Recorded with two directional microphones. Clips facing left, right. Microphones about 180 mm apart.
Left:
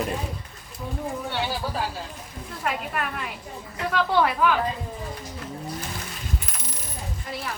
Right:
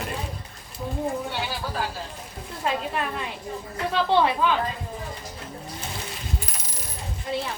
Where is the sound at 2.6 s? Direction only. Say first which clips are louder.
Right 2 dB; 25° right (ahead or behind).